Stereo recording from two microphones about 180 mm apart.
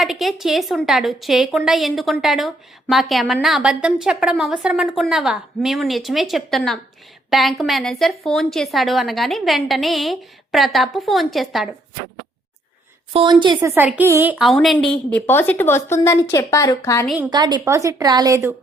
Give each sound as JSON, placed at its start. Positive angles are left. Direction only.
{"t": 0.0, "sound": "a woman's voice", "side_deg": 0}
{"t": 13.6, "sound": "a woman's voice", "side_deg": -10}
{"t": 17.3, "sound": "a woman's voice", "side_deg": -25}